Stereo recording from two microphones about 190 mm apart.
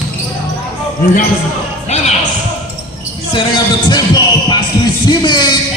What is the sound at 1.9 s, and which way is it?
Basketball bounce, 35° left (ahead or behind).